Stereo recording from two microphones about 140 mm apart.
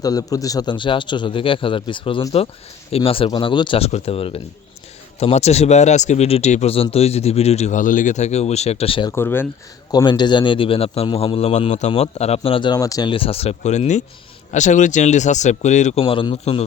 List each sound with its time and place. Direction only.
0.0 s a man's voice: 25° left (ahead or behind); by 9.0 s 45° left (ahead or behind)
9.0 s speech: 15° left (ahead or behind)
9.9 s a man's voice: 30° left (ahead or behind)
13.1 s speech: 40° left (ahead or behind)